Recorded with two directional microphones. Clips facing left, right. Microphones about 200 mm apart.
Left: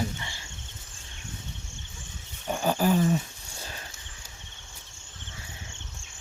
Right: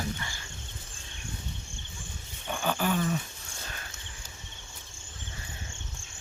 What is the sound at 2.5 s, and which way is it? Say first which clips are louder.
Roaring cats: left 5 dB; 35° left (ahead or behind).